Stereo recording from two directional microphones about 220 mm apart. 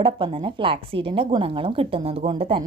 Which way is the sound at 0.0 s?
25° right (ahead or behind).